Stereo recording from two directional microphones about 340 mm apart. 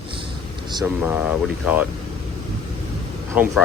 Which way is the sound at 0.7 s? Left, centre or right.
Centre.